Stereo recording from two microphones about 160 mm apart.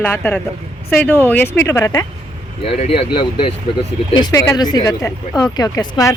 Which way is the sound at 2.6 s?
35° left (ahead or behind).